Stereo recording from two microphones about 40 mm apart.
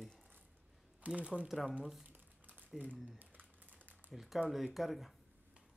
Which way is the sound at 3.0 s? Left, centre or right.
Right.